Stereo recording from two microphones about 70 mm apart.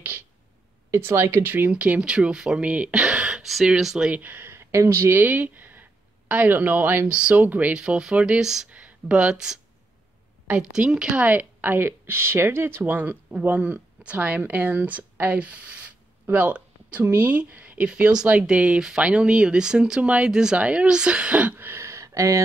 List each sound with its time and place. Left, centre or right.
0.9 s speech: right
1.7 s a woman's voice: centre
4.1 s speech: right
7.1 s a woman's voice: centre
7.7 s speech: centre
10.7 s speech: centre
11.2 s a woman's voice: right